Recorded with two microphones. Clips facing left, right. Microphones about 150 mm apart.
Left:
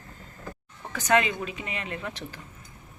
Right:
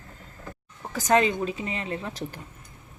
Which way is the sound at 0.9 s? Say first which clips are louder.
Right 2 dB; 35° right (ahead or behind).